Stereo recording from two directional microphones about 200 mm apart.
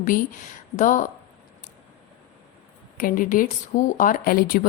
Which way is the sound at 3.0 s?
45° left (ahead or behind).